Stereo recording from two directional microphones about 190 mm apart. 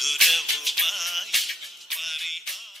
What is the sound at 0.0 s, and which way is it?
Music, centre (ahead or behind).